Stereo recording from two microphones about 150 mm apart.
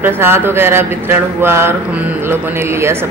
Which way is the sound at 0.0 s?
15° right (ahead or behind).